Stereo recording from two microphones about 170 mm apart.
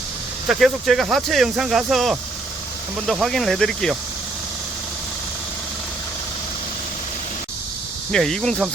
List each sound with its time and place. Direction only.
0.4 s speech: centre (ahead or behind)
8.1 s speech: 5° left (ahead or behind)